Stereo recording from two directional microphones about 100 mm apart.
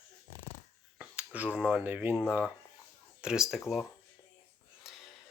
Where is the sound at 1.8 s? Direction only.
20° right (ahead or behind).